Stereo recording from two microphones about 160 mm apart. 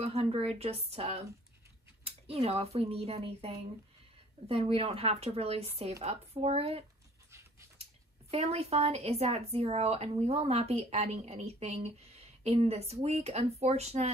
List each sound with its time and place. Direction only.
0.0 s speech: 40° right (ahead or behind)
7.8 s speech: 40° right (ahead or behind)